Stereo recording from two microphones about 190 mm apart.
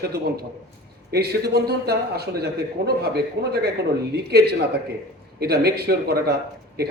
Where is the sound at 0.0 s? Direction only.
55° right (ahead or behind).